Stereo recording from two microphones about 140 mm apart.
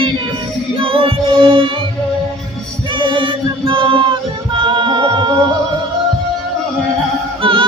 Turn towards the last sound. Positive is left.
turn(degrees=-40)  # may be behind; listen again after turning